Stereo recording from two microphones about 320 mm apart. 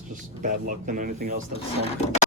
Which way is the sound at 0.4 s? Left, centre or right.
Right.